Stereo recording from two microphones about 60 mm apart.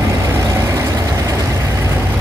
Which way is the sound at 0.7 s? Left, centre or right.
Right.